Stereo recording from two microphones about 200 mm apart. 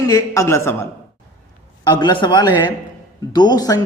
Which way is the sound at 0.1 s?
15° left (ahead or behind).